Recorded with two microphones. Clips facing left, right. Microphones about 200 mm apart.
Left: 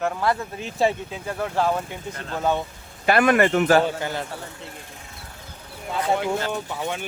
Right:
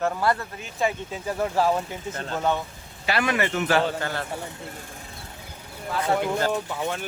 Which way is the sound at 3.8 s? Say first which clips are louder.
Left 1 dB; 15° left (ahead or behind).